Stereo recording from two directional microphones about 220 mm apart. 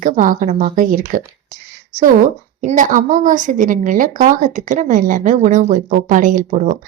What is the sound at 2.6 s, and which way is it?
Speech, 35° right (ahead or behind).